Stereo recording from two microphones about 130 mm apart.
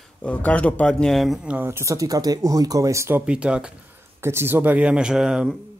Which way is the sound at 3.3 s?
5° right (ahead or behind).